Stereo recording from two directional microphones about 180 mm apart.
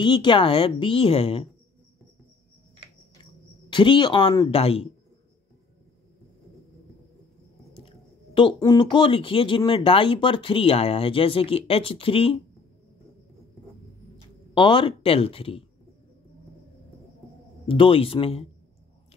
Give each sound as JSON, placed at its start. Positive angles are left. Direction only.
{"t": 0.0, "sound": "a woman's voice", "side_deg": 25}
{"t": 3.7, "sound": "a woman's voice", "side_deg": 25}
{"t": 8.4, "sound": "a woman's voice", "side_deg": 25}
{"t": 14.5, "sound": "speech", "side_deg": 25}
{"t": 17.6, "sound": "speech", "side_deg": 30}